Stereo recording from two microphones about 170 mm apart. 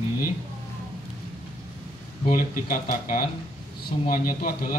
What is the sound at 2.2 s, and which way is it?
A man's voice, 50° left (ahead or behind).